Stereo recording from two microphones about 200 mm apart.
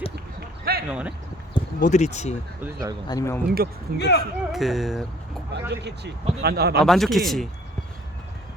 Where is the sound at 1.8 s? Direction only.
40° left (ahead or behind).